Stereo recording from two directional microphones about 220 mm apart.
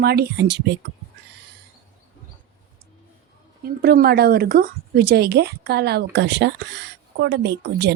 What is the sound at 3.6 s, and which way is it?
A woman's voice, 45° right (ahead or behind).